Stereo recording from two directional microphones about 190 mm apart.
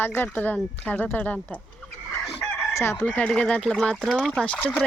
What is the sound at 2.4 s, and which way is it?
Chicken, 15° left (ahead or behind).